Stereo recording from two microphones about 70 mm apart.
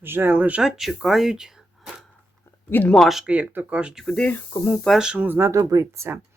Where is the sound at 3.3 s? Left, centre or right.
Right.